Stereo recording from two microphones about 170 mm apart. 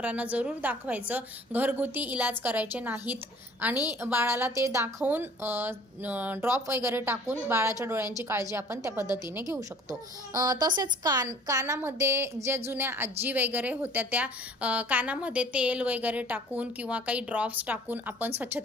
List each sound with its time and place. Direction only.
0.0 s a woman's voice: 10° right (ahead or behind)